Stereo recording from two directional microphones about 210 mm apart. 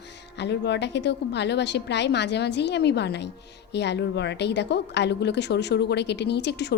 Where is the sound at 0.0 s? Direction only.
55° left (ahead or behind).